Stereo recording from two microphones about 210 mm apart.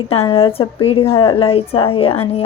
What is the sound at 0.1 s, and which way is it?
A woman's voice, 25° left (ahead or behind).